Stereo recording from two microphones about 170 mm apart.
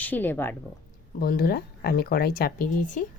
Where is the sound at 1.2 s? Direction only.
60° left (ahead or behind).